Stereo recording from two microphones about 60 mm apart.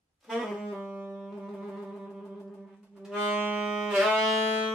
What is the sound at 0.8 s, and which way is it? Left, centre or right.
Saxophone, right.